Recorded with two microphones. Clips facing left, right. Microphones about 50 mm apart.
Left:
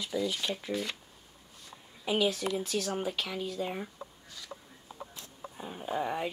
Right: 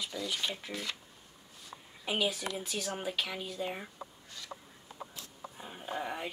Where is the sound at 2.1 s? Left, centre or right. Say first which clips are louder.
Left 4 dB; centre.